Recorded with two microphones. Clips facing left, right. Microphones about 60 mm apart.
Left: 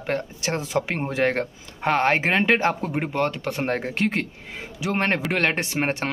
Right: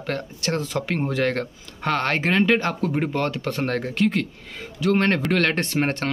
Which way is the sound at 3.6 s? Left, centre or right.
Left.